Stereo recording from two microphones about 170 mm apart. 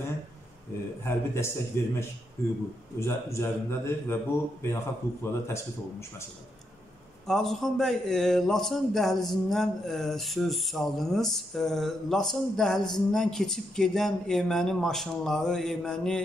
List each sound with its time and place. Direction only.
1.0 s a man's voice: 15° left (ahead or behind)
7.2 s a man's voice: centre (ahead or behind)